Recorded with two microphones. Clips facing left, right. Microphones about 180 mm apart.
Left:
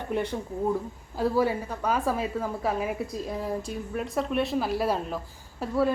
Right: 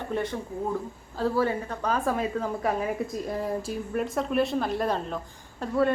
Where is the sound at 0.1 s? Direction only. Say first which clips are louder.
Left 2 dB; 15° left (ahead or behind).